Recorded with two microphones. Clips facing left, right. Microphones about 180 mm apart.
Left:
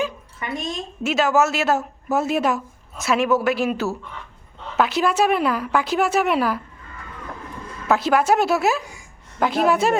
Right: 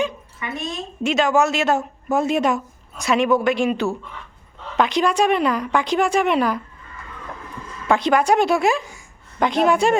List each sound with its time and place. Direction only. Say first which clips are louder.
1.0 s a woman's voice: right 1 dB; 5° left (ahead or behind)
7.9 s a woman's voice: right 1 dB; 5° left (ahead or behind)